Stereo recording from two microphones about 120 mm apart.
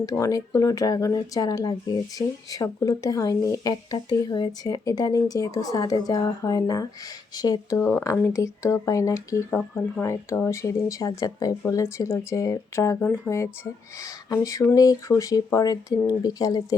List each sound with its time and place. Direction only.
0.0 s speech: 30° left (ahead or behind)
9.6 s speech: 5° left (ahead or behind)
10.0 s speech: 20° left (ahead or behind)
14.8 s speech: 30° left (ahead or behind)